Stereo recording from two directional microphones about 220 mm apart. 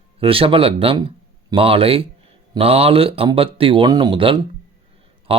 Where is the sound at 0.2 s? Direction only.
25° right (ahead or behind).